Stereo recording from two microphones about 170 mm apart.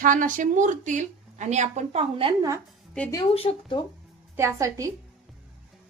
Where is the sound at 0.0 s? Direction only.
50° right (ahead or behind); by 2.3 s 35° right (ahead or behind).